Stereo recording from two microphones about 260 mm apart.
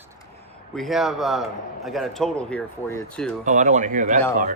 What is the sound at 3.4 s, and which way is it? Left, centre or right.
Speech, right.